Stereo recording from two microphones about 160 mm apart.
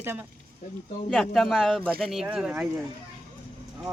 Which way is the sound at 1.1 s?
Centre (ahead or behind).